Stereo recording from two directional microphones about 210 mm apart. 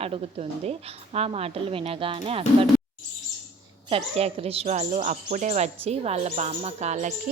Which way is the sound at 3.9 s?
30° right (ahead or behind).